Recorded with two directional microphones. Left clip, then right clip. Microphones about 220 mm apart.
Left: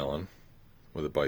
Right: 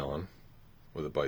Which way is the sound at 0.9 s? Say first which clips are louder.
Left 3 dB; 30° left (ahead or behind).